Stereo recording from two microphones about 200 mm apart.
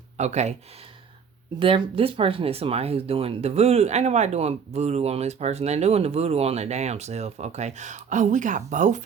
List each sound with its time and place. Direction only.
0.2 s speech: 35° right (ahead or behind)
1.5 s speech: 25° right (ahead or behind)